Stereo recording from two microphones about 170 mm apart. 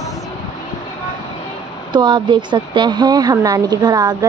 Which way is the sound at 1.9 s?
25° right (ahead or behind).